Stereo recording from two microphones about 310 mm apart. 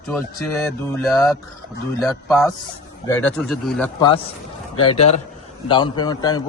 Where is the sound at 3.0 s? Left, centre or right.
Centre.